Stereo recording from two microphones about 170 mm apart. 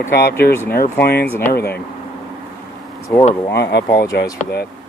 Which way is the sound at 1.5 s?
70° left (ahead or behind).